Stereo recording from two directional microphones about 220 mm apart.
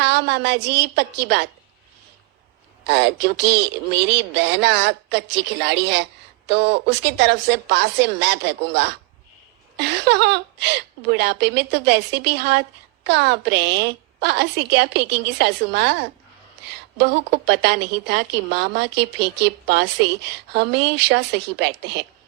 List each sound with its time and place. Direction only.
0.0 s a woman's voice: 50° right (ahead or behind)
2.8 s a woman's voice: 50° right (ahead or behind)